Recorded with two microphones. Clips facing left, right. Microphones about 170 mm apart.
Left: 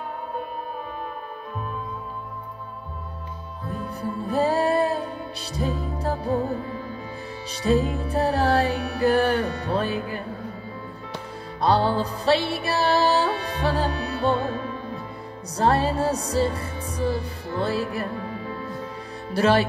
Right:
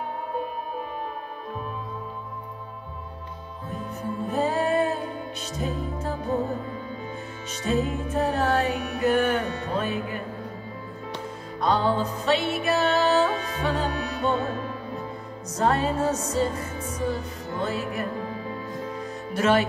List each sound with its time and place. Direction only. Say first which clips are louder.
3.7 s music: left 1 dB; 35° left (ahead or behind)
7.6 s music: left 4 dB; 35° left (ahead or behind)
11.6 s music: left 2 dB; 35° left (ahead or behind)
15.5 s music: left 2 dB; 30° left (ahead or behind)
19.3 s speech: left 2 dB; 35° left (ahead or behind)